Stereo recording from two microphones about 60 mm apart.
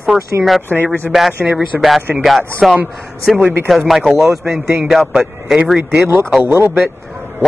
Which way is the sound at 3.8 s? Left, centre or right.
Centre.